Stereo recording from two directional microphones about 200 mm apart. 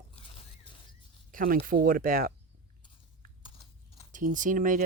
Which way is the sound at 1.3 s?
45° right (ahead or behind).